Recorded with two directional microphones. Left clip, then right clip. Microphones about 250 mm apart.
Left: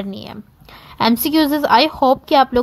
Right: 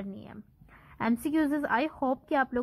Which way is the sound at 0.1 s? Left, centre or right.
Left.